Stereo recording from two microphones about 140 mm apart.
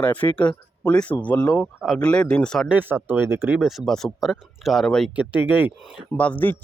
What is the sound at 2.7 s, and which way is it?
Speech, 15° right (ahead or behind).